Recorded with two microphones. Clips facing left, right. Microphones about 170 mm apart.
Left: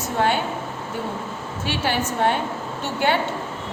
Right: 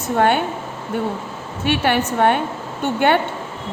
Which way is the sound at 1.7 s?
60° right (ahead or behind).